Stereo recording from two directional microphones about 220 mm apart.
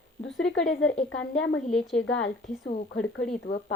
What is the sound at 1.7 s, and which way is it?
Speech, centre (ahead or behind).